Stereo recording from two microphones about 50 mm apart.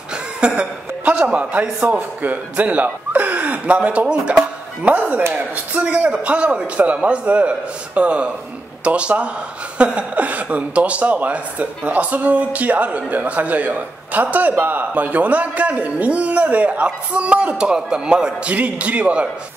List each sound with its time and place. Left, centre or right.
0.6 s a man's voice: right
18.5 s a man's voice: right